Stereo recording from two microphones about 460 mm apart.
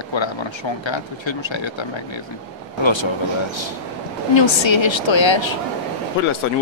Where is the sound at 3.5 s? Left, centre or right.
Left.